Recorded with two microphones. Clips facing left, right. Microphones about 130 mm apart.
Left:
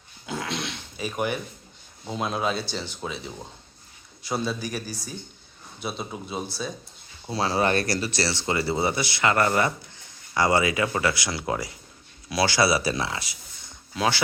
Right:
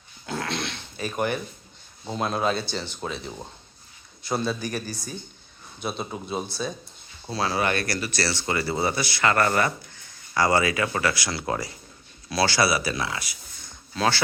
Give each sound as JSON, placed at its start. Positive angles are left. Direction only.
{"t": 0.3, "sound": "a sound", "side_deg": 5}
{"t": 2.0, "sound": "speech", "side_deg": 5}
{"t": 7.3, "sound": "speech", "side_deg": 25}
{"t": 13.9, "sound": "speech", "side_deg": 15}